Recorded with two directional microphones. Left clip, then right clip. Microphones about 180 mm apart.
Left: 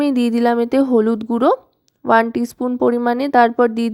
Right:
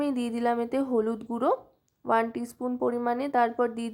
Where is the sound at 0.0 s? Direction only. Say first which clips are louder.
Left 11 dB; 40° left (ahead or behind).